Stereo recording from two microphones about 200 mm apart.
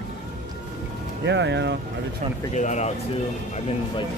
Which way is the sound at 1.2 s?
60° right (ahead or behind).